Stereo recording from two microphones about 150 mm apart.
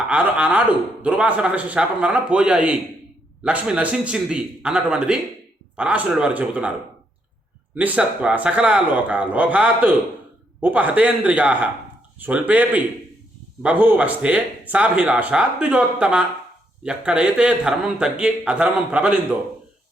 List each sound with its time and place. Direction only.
0.1 s speech: 10° right (ahead or behind)
7.8 s speech: 10° right (ahead or behind)